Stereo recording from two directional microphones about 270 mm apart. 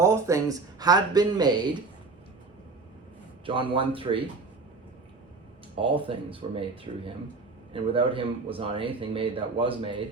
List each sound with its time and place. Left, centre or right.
0.0 s speech: centre
3.4 s speech: centre
5.8 s speech: centre